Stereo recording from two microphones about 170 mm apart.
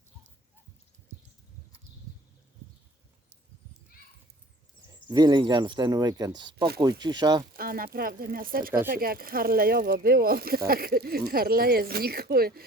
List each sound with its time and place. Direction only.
1.1 s a sound: 40° right (ahead or behind)
5.0 s speech: 25° right (ahead or behind)
7.5 s speech: 60° right (ahead or behind)